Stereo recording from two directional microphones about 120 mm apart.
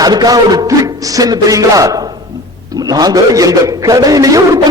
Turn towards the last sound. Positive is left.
turn(degrees=-30)  # may be behind; listen again after turning